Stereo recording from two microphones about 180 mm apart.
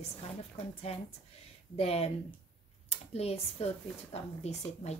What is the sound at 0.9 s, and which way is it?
Speech, 35° left (ahead or behind).